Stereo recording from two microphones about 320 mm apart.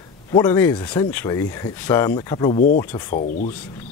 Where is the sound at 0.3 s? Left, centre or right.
Centre.